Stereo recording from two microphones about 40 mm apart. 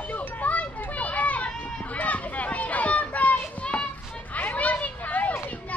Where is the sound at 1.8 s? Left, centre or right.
Left.